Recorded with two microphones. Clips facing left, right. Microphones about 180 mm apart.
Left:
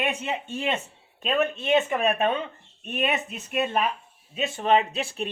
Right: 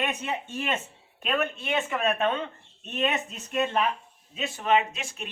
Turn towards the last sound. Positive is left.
turn(degrees=35)  # may be behind; listen again after turning